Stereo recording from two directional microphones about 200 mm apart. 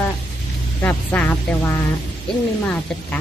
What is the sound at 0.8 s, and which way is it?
A woman's voice, 10° left (ahead or behind).